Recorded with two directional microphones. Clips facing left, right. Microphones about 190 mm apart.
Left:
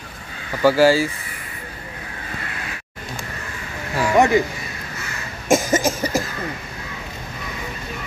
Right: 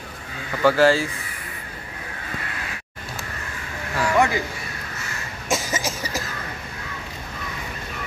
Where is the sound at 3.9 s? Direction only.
20° left (ahead or behind).